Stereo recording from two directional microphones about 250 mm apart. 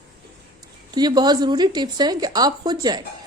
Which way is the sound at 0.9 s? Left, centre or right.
Centre.